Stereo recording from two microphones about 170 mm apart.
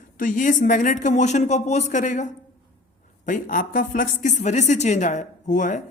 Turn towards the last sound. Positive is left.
turn(degrees=45)  # may be behind; listen again after turning